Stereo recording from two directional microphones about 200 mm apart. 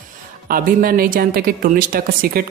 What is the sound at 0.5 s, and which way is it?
Speech, 45° right (ahead or behind).